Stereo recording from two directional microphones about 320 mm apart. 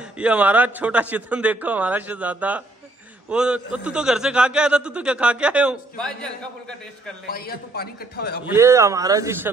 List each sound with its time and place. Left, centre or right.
0.0 s a man's voice: centre
7.2 s a man's voice: left
8.5 s speech: centre